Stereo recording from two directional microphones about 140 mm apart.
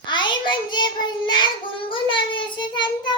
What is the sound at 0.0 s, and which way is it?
Child singing, 35° left (ahead or behind).